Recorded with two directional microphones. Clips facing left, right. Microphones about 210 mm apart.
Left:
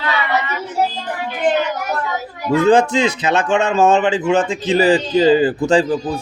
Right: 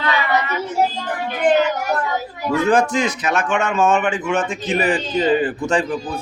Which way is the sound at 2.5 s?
25° left (ahead or behind).